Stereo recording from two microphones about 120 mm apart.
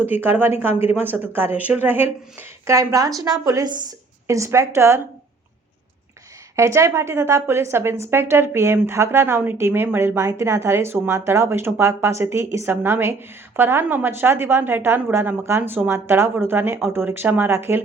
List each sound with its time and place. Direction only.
0.1 s a woman's voice: 15° right (ahead or behind)
6.6 s a woman's voice: 25° right (ahead or behind)